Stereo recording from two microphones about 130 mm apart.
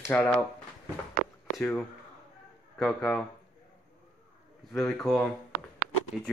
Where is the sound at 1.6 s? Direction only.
5° left (ahead or behind).